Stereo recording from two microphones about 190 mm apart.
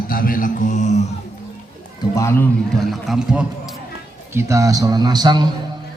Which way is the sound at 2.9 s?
Centre (ahead or behind).